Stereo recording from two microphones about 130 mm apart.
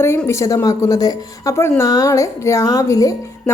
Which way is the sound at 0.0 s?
20° left (ahead or behind).